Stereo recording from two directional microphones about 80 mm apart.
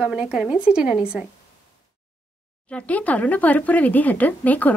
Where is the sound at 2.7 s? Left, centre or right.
Centre.